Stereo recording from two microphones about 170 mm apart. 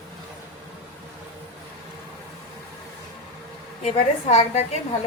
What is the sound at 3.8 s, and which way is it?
Speech, 40° left (ahead or behind).